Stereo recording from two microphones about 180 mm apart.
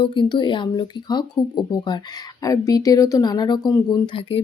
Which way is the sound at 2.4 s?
20° left (ahead or behind).